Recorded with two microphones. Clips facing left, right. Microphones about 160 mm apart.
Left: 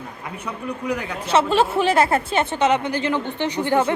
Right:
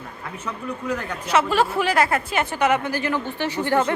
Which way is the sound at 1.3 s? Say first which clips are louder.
Left 2 dB; 25° left (ahead or behind).